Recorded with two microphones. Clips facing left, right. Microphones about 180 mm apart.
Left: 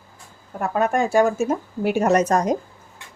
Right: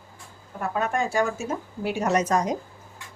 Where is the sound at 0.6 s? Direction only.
50° left (ahead or behind).